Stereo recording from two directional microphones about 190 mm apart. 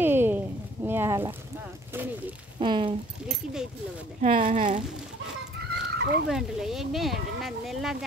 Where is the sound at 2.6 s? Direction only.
25° right (ahead or behind).